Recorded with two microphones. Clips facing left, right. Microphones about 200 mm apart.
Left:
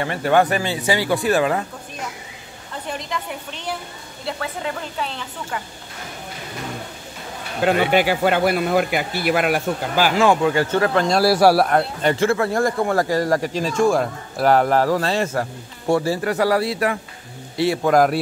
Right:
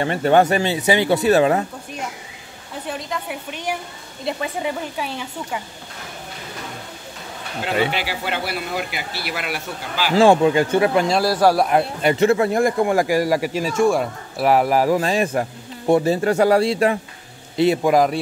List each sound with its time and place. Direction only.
0.0 s speech: 25° right (ahead or behind)
2.9 s speech: 5° right (ahead or behind)
7.6 s speech: 50° left (ahead or behind)
10.1 s speech: 30° right (ahead or behind)
11.2 s a man's voice: 10° left (ahead or behind)
11.7 s speech: 15° right (ahead or behind)
17.9 s a man's voice: 5° left (ahead or behind)